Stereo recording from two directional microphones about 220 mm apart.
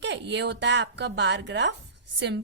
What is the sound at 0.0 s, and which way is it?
A woman's voice, 50° right (ahead or behind).